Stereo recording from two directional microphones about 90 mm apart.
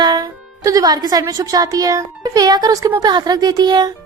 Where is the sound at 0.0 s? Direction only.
50° right (ahead or behind).